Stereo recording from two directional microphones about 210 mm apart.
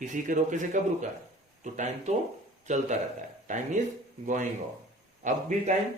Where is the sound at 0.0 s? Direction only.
35° right (ahead or behind).